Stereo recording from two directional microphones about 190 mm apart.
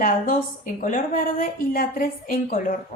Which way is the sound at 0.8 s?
45° left (ahead or behind).